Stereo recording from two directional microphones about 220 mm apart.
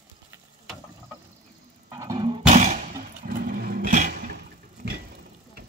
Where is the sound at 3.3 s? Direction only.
40° right (ahead or behind).